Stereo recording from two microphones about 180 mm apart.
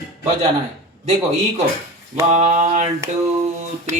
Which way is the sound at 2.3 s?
40° right (ahead or behind).